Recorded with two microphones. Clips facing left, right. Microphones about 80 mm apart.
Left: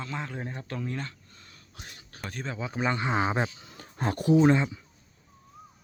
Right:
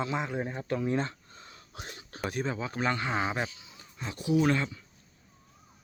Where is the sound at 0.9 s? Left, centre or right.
Right.